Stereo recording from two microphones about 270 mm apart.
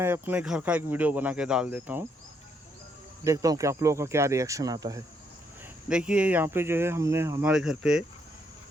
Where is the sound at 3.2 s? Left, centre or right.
Centre.